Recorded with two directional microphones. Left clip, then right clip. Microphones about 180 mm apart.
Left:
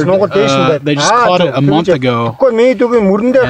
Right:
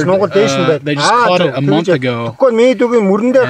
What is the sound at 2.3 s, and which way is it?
Speech, 50° right (ahead or behind).